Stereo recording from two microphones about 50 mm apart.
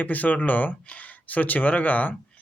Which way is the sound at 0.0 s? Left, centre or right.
Left.